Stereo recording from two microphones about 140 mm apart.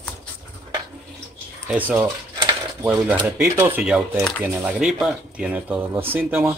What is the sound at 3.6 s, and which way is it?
Speech, 15° right (ahead or behind).